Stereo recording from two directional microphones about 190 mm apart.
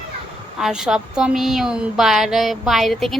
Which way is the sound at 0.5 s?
5° right (ahead or behind).